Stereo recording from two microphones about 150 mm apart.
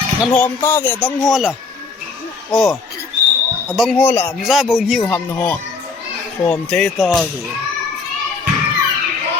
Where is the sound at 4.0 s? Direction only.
15° left (ahead or behind).